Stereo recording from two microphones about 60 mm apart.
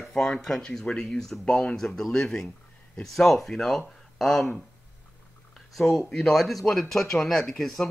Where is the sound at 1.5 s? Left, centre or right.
Centre.